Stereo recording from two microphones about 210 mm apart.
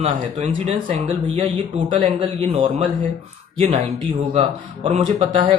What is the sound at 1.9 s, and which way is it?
Speech, 30° right (ahead or behind).